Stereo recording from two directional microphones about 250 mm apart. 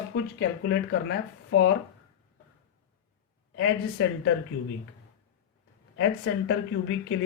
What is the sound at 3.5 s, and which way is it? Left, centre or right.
Speech, left.